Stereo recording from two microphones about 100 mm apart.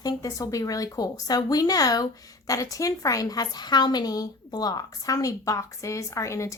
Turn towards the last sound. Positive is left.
turn(degrees=30)  # may be behind; listen again after turning